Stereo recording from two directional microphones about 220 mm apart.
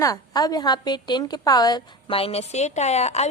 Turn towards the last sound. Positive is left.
turn(degrees=30)  # may be behind; listen again after turning